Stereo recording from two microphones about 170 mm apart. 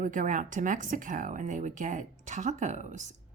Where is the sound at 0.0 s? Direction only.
50° right (ahead or behind).